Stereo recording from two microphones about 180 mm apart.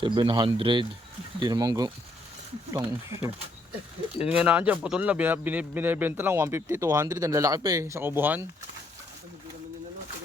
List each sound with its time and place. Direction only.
0.0 s a man's voice: 25° right (ahead or behind)